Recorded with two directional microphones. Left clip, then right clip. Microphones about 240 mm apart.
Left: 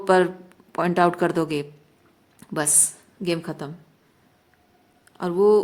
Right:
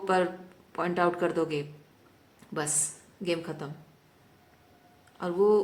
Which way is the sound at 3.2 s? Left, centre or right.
Left.